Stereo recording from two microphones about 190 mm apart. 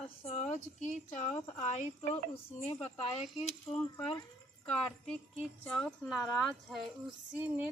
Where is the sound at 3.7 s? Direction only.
5° left (ahead or behind).